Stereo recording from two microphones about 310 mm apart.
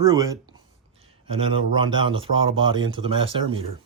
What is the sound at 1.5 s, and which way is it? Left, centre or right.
Speech, centre.